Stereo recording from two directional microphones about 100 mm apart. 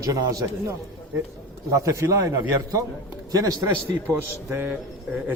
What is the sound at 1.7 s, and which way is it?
A man's voice, 35° right (ahead or behind).